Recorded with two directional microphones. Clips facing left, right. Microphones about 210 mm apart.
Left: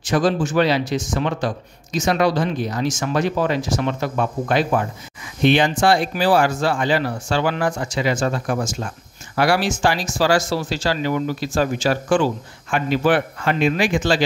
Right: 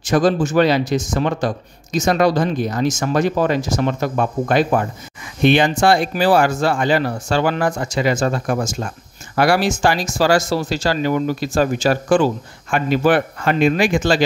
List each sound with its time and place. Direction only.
0.0 s speech: 45° right (ahead or behind)